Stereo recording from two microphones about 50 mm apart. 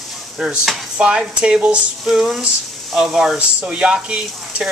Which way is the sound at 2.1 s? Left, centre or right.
Centre.